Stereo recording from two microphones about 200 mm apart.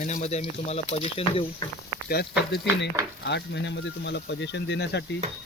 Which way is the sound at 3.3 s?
60° left (ahead or behind).